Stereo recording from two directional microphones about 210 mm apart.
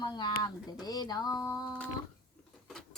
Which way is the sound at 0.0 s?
20° left (ahead or behind).